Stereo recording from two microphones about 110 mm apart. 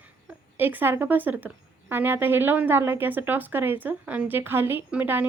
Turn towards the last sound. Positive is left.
turn(degrees=-15)  # may be behind; listen again after turning